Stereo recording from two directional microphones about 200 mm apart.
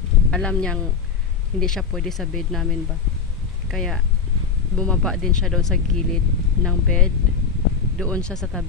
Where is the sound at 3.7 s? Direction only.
Centre (ahead or behind).